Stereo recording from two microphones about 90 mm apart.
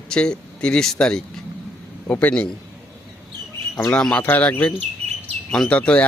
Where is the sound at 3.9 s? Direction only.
10° left (ahead or behind).